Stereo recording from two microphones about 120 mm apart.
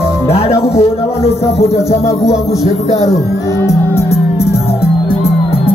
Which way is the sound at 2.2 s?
Centre (ahead or behind).